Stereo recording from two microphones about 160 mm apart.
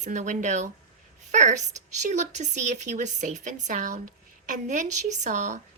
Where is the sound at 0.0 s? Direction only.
50° right (ahead or behind).